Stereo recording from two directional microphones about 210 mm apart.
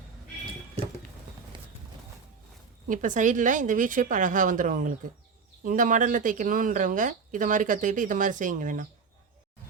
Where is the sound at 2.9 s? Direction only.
35° right (ahead or behind).